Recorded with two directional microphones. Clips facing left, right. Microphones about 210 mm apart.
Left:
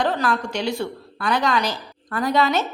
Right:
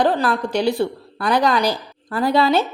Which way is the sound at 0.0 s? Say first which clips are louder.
Right 4 dB; 35° right (ahead or behind).